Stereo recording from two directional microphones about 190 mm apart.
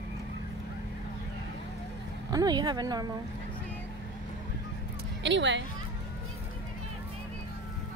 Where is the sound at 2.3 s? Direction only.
20° right (ahead or behind).